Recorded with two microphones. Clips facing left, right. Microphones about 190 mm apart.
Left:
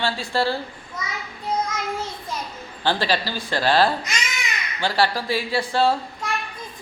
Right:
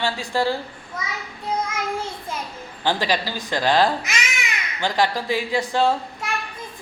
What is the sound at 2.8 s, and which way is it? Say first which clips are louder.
Speech: even; 15° right (ahead or behind).